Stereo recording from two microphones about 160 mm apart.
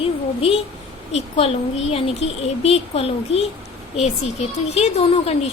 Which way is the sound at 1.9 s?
35° left (ahead or behind).